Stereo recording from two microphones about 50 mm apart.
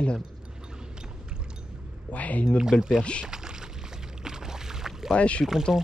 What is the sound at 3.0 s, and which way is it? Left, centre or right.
Speech, left.